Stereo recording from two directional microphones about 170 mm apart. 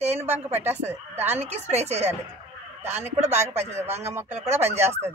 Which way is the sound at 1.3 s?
40° right (ahead or behind).